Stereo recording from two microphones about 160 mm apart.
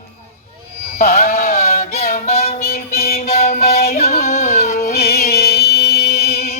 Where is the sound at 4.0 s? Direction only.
45° left (ahead or behind).